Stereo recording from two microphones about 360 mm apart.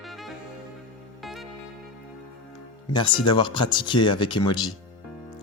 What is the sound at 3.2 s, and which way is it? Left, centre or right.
Speech, centre.